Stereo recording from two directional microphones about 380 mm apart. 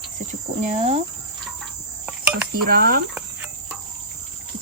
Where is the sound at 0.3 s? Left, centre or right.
Centre.